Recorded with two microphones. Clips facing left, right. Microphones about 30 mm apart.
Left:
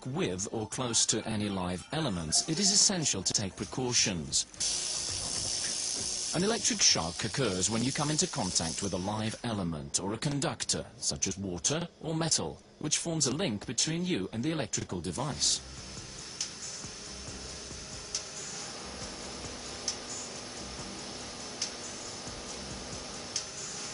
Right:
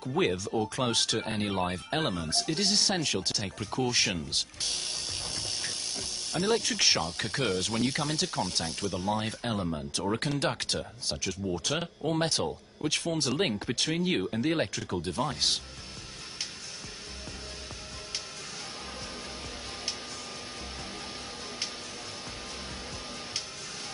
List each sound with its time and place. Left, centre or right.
0.1 s speech: right
2.1 s speech: right
6.4 s speech: right
8.9 s speech: right
9.4 s speech: right